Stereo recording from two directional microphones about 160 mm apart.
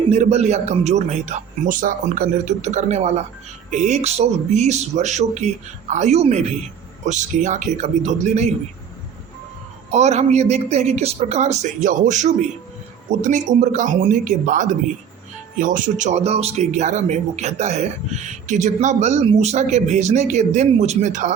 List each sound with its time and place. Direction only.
0.1 s speech: 45° right (ahead or behind)
9.9 s speech: 45° right (ahead or behind)